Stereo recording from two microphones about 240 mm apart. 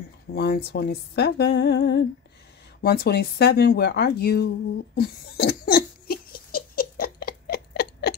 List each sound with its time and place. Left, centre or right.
0.3 s speech: left
4.9 s laughter: left